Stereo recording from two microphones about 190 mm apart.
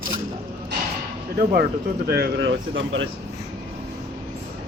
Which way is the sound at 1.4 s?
50° right (ahead or behind).